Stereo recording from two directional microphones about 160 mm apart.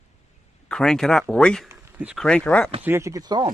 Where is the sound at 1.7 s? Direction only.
10° right (ahead or behind).